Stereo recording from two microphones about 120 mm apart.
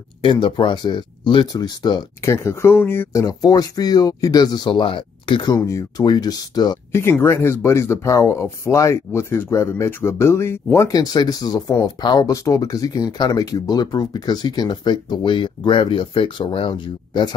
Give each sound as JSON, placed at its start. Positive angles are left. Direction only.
{"t": 0.2, "sound": "speech", "side_deg": 40}
{"t": 2.2, "sound": "speech", "side_deg": 20}
{"t": 5.6, "sound": "speech", "side_deg": 25}
{"t": 6.9, "sound": "speech", "side_deg": 20}